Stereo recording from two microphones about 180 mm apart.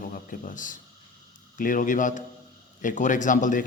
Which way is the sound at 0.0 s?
50° left (ahead or behind).